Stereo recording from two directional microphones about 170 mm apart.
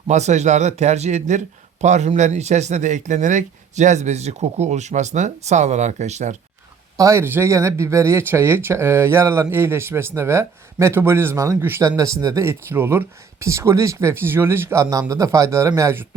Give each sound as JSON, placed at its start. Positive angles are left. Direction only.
{"t": 0.1, "sound": "speech", "side_deg": -40}
{"t": 6.9, "sound": "speech", "side_deg": -20}